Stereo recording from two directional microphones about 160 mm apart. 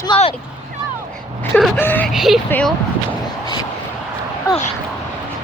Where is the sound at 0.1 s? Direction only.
30° left (ahead or behind).